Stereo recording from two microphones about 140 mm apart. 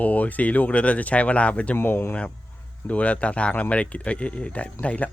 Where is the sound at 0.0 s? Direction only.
10° left (ahead or behind).